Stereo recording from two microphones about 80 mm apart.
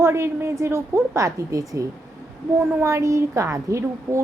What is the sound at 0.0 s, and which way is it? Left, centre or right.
A woman's voice, right.